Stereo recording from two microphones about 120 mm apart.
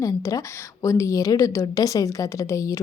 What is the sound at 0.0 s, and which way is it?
A woman's voice, 30° left (ahead or behind).